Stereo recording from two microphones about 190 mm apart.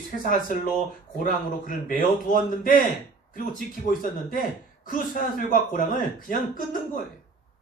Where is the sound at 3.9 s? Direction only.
45° left (ahead or behind).